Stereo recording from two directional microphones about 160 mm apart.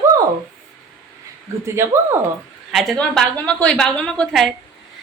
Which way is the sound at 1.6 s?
15° right (ahead or behind).